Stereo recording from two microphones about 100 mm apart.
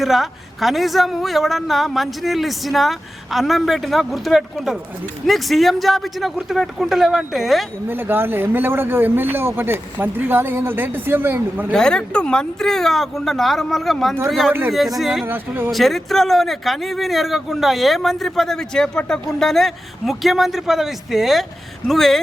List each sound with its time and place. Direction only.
0.0 s speech: centre (ahead or behind)
7.9 s a man's voice: 20° right (ahead or behind)
11.7 s speech: 5° left (ahead or behind)
15.2 s a man's voice: 20° right (ahead or behind)
15.7 s speech: centre (ahead or behind)